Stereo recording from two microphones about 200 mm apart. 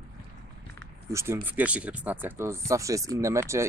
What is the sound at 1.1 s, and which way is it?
Speech, 15° right (ahead or behind).